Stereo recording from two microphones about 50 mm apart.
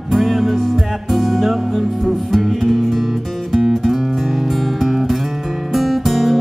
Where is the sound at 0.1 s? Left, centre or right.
Centre.